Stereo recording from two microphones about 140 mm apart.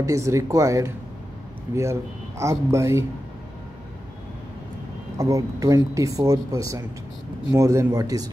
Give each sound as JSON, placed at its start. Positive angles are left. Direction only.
{"t": 0.0, "sound": "speech", "side_deg": -20}
{"t": 5.1, "sound": "speech", "side_deg": -20}